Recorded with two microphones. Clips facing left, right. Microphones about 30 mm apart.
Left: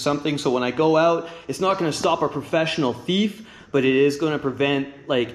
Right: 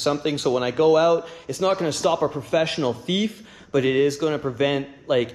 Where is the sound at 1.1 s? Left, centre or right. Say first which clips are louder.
Right 1 dB; left.